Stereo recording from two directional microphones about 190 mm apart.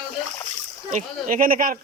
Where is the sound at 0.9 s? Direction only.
45° right (ahead or behind).